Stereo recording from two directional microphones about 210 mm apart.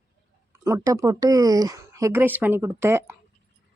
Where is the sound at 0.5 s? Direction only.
15° right (ahead or behind).